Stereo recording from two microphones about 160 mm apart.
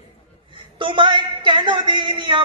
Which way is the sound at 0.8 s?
30° right (ahead or behind).